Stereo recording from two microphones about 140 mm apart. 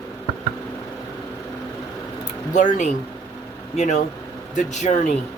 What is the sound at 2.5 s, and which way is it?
Speech, 60° left (ahead or behind).